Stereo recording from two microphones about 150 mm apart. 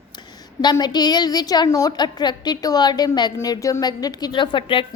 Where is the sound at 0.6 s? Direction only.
30° left (ahead or behind).